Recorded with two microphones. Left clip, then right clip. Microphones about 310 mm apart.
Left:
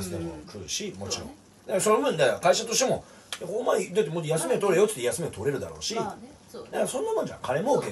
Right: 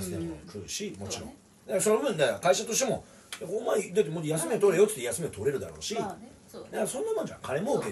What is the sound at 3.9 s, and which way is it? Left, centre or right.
Speech, left.